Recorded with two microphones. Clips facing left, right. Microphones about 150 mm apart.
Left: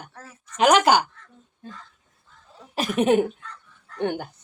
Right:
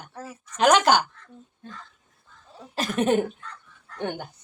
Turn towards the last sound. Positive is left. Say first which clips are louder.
# left 4 dB
turn(degrees=5)  # may be behind; listen again after turning